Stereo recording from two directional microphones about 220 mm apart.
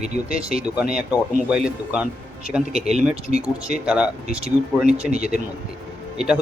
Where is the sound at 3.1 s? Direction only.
25° right (ahead or behind).